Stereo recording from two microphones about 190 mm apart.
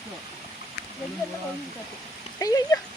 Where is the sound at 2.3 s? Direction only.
20° left (ahead or behind).